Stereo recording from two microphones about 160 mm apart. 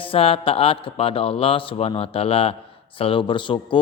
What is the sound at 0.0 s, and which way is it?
A man's voice, 35° left (ahead or behind).